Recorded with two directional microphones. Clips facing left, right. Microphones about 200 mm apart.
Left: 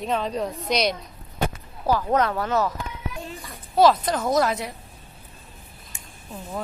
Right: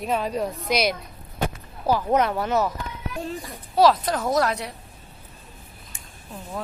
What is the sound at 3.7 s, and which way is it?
Speech, centre (ahead or behind).